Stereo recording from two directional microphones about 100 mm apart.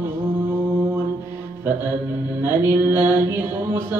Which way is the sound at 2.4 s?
20° right (ahead or behind).